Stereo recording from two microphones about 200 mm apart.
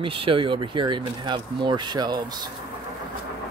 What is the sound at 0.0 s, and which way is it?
Speech, 25° right (ahead or behind).